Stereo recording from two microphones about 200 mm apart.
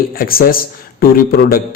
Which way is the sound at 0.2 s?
45° left (ahead or behind).